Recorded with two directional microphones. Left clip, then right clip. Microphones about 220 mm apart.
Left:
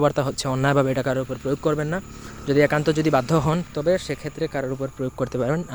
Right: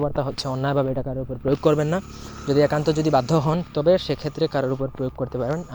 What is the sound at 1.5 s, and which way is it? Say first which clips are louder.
Speech: right 5 dB; 10° right (ahead or behind).